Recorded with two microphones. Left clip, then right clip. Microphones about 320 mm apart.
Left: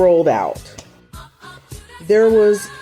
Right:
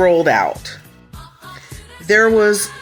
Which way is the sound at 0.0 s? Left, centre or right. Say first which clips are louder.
Even; right.